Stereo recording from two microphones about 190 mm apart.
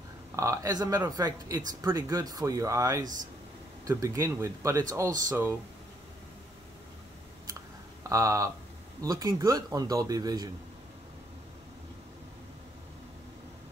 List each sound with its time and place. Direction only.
0.4 s speech: 15° right (ahead or behind)
8.1 s speech: 15° right (ahead or behind)